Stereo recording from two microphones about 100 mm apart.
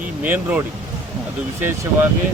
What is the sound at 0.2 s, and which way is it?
Speech, 15° right (ahead or behind).